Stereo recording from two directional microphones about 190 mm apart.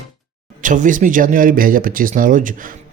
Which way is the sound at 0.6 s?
45° right (ahead or behind).